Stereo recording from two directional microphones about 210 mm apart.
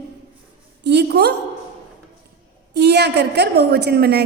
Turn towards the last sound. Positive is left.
turn(degrees=-50)  # may be behind; listen again after turning